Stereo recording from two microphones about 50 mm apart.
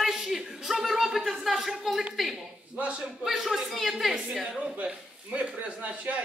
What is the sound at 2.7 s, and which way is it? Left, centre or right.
Speech, right.